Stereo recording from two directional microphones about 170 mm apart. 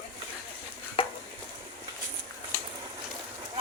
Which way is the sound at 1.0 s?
30° left (ahead or behind).